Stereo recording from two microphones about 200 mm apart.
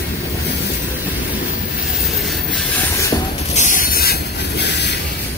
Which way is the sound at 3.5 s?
40° left (ahead or behind).